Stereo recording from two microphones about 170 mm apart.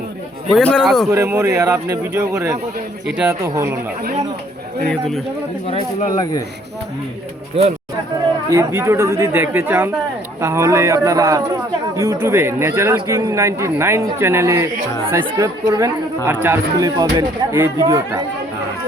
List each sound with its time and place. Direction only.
0.5 s speech: 5° left (ahead or behind)
1.1 s a man's voice: 15° right (ahead or behind)
4.9 s speech: 5° left (ahead or behind)
5.6 s speech: 35° left (ahead or behind)
7.6 s speech: 35° right (ahead or behind)
8.4 s a man's voice: 15° right (ahead or behind)